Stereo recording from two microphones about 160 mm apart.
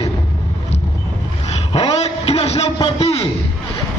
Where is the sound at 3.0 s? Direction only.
40° left (ahead or behind).